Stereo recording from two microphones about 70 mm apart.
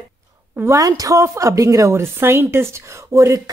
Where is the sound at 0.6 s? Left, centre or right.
Right.